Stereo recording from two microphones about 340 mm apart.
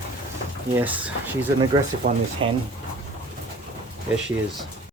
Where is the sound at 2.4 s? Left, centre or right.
Centre.